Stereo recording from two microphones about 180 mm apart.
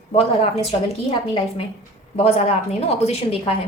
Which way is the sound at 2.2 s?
35° left (ahead or behind).